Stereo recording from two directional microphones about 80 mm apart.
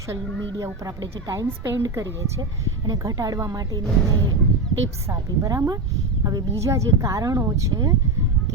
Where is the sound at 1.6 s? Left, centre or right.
Right.